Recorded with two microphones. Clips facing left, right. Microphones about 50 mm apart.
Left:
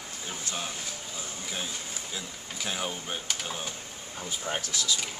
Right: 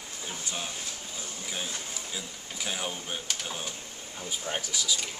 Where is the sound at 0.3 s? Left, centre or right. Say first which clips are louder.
Left 1 dB; centre.